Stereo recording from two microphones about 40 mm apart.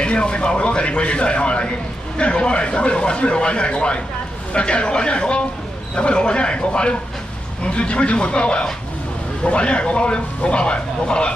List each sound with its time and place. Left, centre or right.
0.0 s a man's voice: left